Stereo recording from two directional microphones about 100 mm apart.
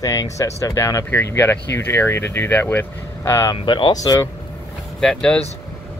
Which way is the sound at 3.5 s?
55° left (ahead or behind).